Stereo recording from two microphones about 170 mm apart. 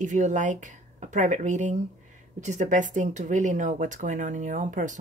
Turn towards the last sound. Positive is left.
turn(degrees=-45)  # may be behind; listen again after turning